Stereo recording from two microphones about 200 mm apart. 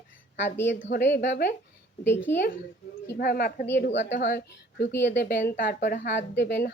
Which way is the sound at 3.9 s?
65° left (ahead or behind).